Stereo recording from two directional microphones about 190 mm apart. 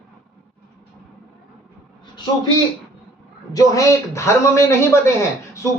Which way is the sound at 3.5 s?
15° left (ahead or behind).